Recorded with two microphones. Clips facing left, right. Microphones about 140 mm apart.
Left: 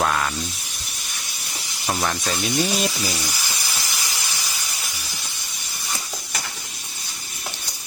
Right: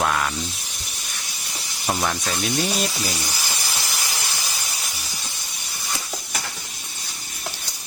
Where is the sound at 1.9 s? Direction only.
Centre (ahead or behind).